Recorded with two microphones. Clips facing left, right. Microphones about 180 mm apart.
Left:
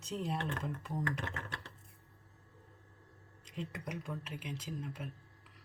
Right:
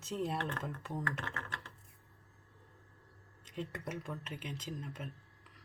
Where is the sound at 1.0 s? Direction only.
15° left (ahead or behind).